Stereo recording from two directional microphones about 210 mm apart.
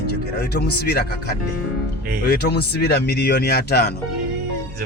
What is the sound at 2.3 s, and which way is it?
Speech, 50° left (ahead or behind).